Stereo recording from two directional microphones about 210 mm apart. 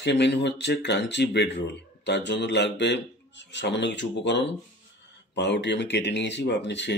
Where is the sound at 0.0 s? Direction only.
55° left (ahead or behind).